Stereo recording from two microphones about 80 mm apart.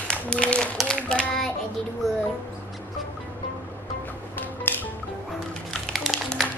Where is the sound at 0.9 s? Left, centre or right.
Centre.